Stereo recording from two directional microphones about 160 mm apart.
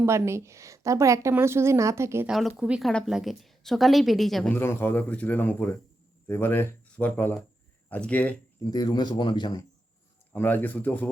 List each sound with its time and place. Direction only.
0.0 s a woman's voice: 15° right (ahead or behind)
2.6 s a woman's voice: 5° right (ahead or behind)
4.5 s speech: 15° left (ahead or behind)
8.7 s a man's voice: 25° left (ahead or behind)
10.3 s speech: 10° left (ahead or behind)